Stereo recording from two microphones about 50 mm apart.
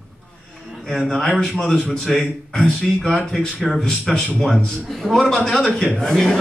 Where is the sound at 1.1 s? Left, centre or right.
Centre.